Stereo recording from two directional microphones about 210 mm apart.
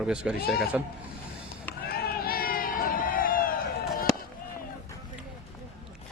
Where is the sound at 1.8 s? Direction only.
45° left (ahead or behind).